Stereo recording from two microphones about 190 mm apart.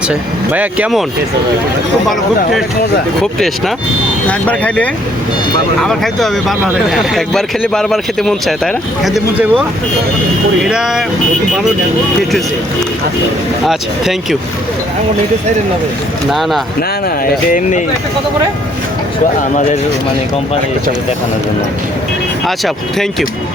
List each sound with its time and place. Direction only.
0.1 s speech: 5° right (ahead or behind)
2.0 s speech: centre (ahead or behind)
4.3 s speech: 5° left (ahead or behind)
13.7 s speech: centre (ahead or behind)
17.5 s speech: 40° left (ahead or behind)
22.4 s speech: centre (ahead or behind)